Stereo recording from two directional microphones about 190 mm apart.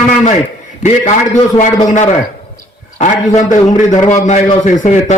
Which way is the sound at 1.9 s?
40° left (ahead or behind).